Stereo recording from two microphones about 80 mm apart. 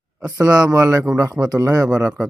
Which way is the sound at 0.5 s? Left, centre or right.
Right.